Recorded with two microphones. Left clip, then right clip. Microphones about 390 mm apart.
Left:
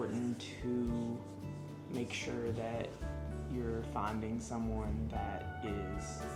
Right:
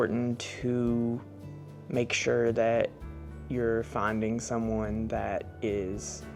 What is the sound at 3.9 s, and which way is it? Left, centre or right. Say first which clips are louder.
Speech: right 9 dB; right.